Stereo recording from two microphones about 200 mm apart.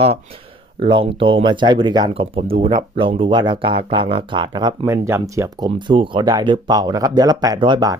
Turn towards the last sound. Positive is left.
turn(degrees=-20)  # may be behind; listen again after turning